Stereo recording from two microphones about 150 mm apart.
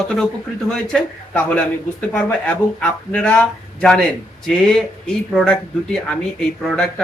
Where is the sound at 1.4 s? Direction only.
10° left (ahead or behind).